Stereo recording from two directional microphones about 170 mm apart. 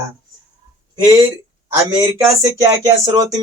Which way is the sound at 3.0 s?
20° right (ahead or behind).